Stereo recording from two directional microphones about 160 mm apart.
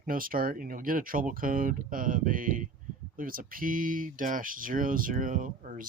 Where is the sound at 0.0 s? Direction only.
60° right (ahead or behind).